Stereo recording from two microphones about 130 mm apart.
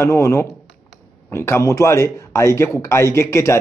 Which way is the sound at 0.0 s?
20° left (ahead or behind).